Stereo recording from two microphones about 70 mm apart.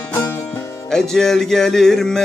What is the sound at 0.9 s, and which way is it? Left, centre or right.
Music, centre.